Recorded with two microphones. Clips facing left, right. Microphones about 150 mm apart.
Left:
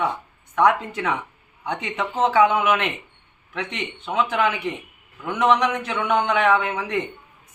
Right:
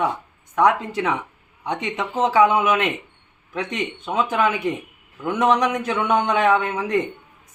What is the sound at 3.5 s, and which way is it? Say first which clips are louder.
Speech: right 4 dB; 40° right (ahead or behind).